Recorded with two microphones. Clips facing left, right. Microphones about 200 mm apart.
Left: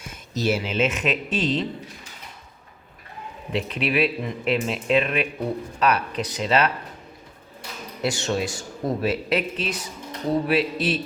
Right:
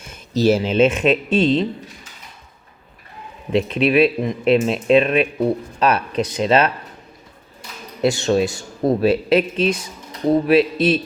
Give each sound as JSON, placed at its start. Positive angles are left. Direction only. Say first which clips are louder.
{"t": 0.3, "sound": "speech", "louder": "right 8 dB", "side_deg": -35}
{"t": 3.5, "sound": "speech", "louder": "right 8 dB", "side_deg": -25}
{"t": 8.0, "sound": "speech", "louder": "right 8 dB", "side_deg": -25}